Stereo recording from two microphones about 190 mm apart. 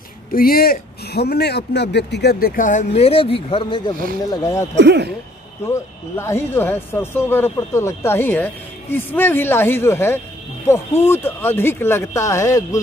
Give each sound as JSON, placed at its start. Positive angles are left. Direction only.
{"t": 0.3, "sound": "speech", "side_deg": 50}
{"t": 4.7, "sound": "speech", "side_deg": -65}
{"t": 5.7, "sound": "speech", "side_deg": 15}